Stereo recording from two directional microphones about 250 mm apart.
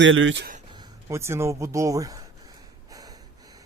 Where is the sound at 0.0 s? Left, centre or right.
Right.